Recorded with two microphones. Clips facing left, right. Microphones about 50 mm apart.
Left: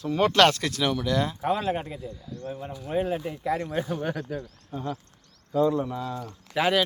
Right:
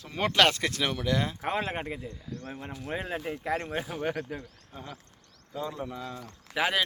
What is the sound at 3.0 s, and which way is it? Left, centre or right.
Speech, right.